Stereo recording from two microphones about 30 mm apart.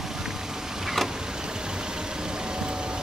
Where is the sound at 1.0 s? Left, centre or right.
Right.